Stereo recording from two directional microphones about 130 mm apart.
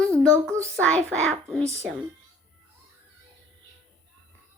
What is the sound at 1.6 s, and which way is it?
Speech, 20° right (ahead or behind).